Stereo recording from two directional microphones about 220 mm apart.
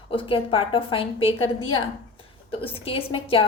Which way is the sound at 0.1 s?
25° left (ahead or behind).